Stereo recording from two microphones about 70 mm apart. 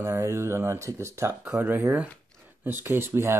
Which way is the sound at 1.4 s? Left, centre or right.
Centre.